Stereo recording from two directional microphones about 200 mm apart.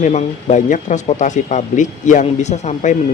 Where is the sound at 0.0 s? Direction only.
35° left (ahead or behind).